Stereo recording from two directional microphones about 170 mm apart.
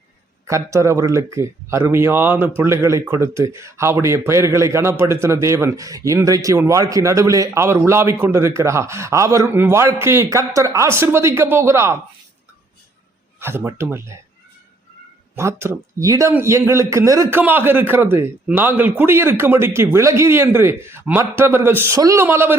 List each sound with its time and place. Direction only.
0.4 s a man's voice: 15° right (ahead or behind)
13.4 s a man's voice: 15° right (ahead or behind)
15.4 s a man's voice: 15° right (ahead or behind)